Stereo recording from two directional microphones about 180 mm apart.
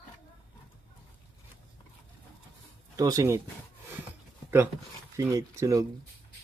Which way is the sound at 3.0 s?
20° right (ahead or behind).